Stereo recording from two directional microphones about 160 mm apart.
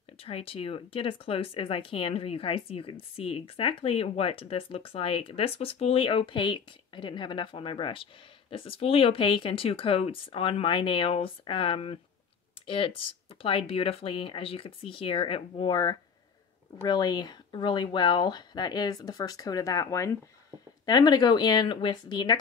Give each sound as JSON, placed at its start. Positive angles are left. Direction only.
{"t": 0.2, "sound": "speech", "side_deg": 35}